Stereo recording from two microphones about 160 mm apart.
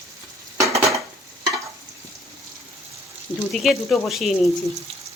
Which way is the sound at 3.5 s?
Centre (ahead or behind).